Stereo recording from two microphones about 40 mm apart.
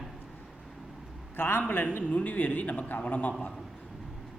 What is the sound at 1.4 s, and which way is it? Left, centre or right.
Speech, left.